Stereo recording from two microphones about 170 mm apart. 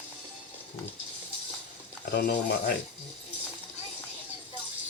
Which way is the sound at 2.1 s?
70° left (ahead or behind).